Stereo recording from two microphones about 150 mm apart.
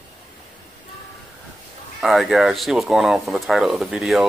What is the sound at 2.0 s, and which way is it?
Speech, centre (ahead or behind).